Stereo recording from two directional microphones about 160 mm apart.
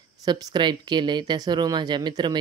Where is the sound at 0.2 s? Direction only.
25° right (ahead or behind).